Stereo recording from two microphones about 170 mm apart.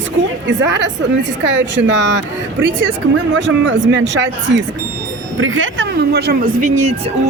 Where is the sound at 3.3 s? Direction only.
90° right.